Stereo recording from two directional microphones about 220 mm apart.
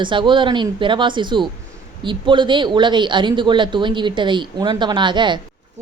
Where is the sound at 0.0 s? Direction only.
20° right (ahead or behind).